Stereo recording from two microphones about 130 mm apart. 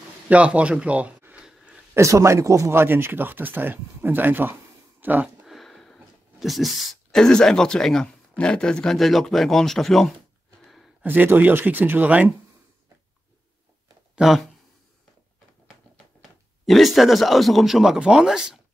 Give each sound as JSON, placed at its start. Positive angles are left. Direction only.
{"t": 0.3, "sound": "a sound", "side_deg": -10}
{"t": 2.0, "sound": "speech", "side_deg": -25}
{"t": 10.6, "sound": "a sound", "side_deg": 0}
{"t": 11.0, "sound": "speech", "side_deg": -15}
{"t": 14.1, "sound": "speech", "side_deg": 0}
{"t": 15.7, "sound": "speech", "side_deg": 0}